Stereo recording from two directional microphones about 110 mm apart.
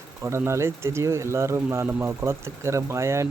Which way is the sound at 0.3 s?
25° right (ahead or behind).